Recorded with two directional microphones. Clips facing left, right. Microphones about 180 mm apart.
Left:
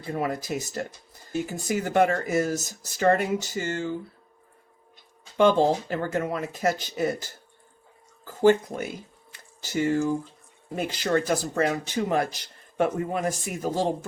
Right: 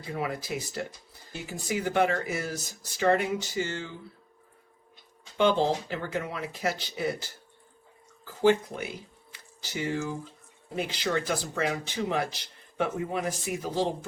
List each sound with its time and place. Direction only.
0.1 s speech: 45° left (ahead or behind)
5.4 s speech: 45° left (ahead or behind)